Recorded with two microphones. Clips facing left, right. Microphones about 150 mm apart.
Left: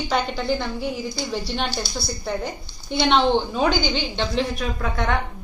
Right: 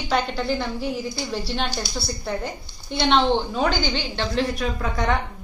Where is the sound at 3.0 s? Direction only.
Centre (ahead or behind).